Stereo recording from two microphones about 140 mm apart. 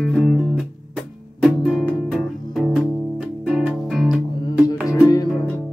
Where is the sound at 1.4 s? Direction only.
5° left (ahead or behind).